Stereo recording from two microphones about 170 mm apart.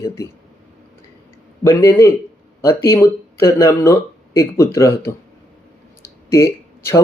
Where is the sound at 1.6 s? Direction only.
15° left (ahead or behind).